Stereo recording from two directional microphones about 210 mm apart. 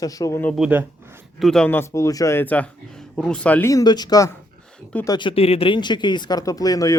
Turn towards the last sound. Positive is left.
turn(degrees=15)  # may be behind; listen again after turning